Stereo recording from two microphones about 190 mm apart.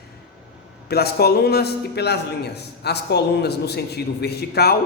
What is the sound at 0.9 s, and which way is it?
A man's voice, 55° left (ahead or behind).